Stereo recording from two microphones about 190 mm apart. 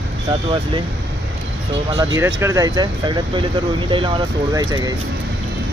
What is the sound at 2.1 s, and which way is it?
Speech, 15° right (ahead or behind).